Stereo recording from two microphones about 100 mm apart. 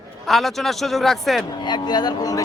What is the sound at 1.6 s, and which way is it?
Speech, 45° left (ahead or behind).